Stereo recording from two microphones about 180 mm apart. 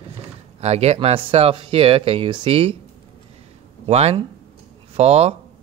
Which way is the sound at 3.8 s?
35° right (ahead or behind).